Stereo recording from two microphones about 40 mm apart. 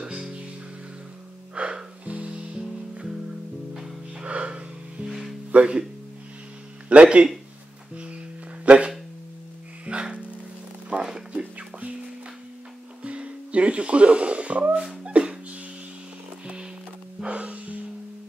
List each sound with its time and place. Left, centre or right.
0.0 s music: right
1.5 s music: right
2.6 s music: centre
4.2 s music: right
5.5 s speech: right
6.9 s speech: right
7.9 s music: right
8.6 s a sound: right
9.8 s music: right
13.0 s music: right
15.0 s a sound: right
17.2 s music: right